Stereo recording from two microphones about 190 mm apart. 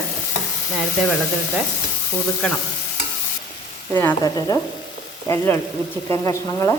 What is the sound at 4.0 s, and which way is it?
Frying, 15° left (ahead or behind).